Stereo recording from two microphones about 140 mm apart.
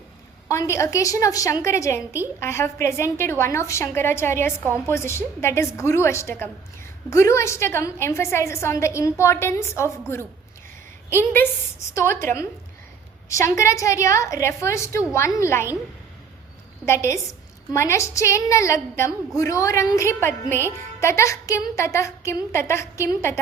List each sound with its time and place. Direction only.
0.4 s a woman's voice: 20° left (ahead or behind)
16.8 s a woman's voice: 20° left (ahead or behind)